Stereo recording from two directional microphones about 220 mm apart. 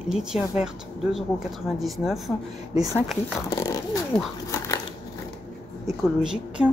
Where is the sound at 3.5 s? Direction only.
15° left (ahead or behind).